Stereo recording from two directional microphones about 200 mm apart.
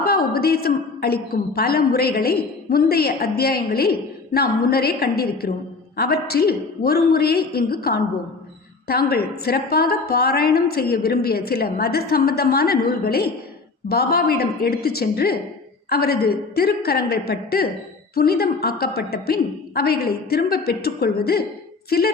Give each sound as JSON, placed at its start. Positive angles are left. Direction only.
{"t": 0.0, "sound": "a woman's voice", "side_deg": 50}
{"t": 9.0, "sound": "a woman's voice", "side_deg": 50}